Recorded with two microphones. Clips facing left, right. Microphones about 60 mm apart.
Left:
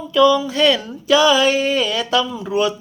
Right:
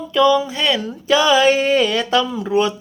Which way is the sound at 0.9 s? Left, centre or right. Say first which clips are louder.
Left 1 dB; right.